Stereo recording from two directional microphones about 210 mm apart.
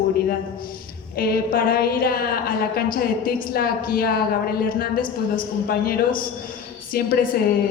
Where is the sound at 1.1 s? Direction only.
45° left (ahead or behind).